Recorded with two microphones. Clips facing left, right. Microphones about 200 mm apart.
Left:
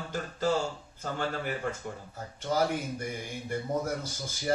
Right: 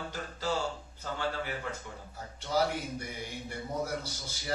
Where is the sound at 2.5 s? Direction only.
50° left (ahead or behind).